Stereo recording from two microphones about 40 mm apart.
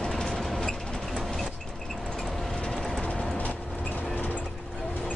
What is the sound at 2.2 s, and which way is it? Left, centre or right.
Vehicle, centre.